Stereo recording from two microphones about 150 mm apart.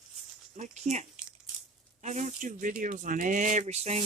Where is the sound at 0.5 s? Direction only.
50° right (ahead or behind).